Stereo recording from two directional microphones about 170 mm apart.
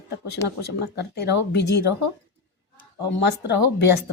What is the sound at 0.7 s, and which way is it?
Speech, 75° left (ahead or behind).